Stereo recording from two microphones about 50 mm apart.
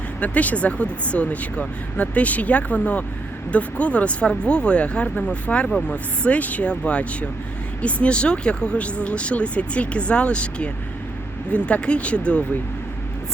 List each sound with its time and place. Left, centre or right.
0.2 s speech: left